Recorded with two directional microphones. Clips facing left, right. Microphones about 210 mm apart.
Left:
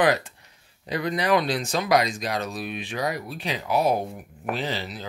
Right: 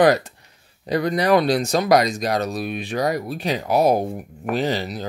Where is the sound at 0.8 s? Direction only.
40° right (ahead or behind).